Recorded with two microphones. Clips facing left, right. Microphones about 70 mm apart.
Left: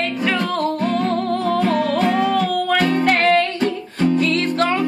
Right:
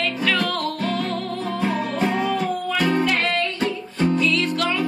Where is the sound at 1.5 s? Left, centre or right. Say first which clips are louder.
Left 5 dB; left.